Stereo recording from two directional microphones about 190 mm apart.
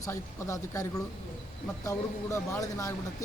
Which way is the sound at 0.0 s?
15° left (ahead or behind).